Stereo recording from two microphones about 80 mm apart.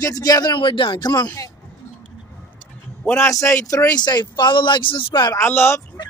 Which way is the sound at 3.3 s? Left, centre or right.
Left.